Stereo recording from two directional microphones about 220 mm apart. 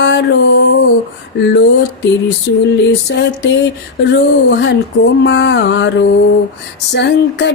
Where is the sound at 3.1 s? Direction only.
55° left (ahead or behind).